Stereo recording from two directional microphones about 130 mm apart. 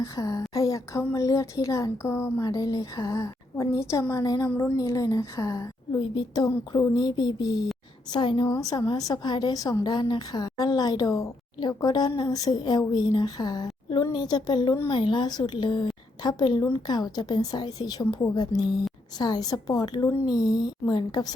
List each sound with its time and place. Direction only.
0.0 s a woman's voice: 25° left (ahead or behind)
4.4 s a woman's voice: 15° left (ahead or behind)
4.8 s a woman's voice: 30° left (ahead or behind)